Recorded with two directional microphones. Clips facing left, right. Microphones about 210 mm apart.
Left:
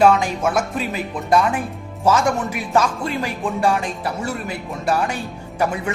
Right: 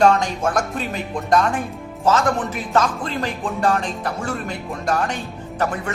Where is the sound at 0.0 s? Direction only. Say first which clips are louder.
Left 1 dB; 5° left (ahead or behind).